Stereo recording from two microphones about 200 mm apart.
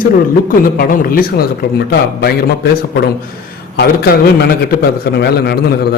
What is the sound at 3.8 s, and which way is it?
A man's voice, 50° left (ahead or behind).